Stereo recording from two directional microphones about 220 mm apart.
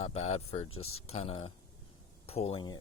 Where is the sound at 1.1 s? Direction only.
30° left (ahead or behind).